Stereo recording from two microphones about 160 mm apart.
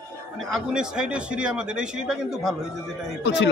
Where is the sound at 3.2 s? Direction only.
90° left.